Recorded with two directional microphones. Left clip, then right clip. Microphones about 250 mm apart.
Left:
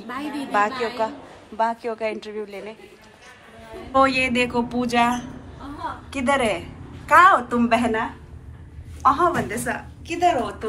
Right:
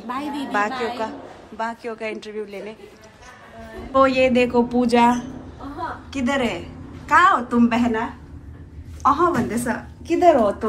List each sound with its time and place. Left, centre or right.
0.2 s a woman's voice: centre
3.9 s a woman's voice: centre
6.0 s a woman's voice: centre
9.0 s a woman's voice: centre